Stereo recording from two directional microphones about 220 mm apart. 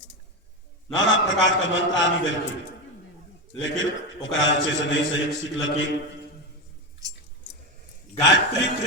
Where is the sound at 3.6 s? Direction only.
60° left (ahead or behind).